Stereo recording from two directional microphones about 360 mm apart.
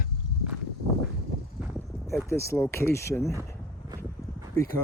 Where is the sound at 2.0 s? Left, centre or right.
Centre.